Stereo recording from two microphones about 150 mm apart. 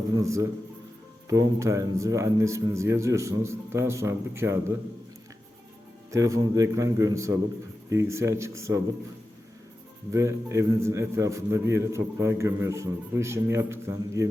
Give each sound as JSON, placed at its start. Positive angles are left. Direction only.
{"t": 0.2, "sound": "a man's voice", "side_deg": -20}
{"t": 6.1, "sound": "a man's voice", "side_deg": -20}
{"t": 10.1, "sound": "a man's voice", "side_deg": -20}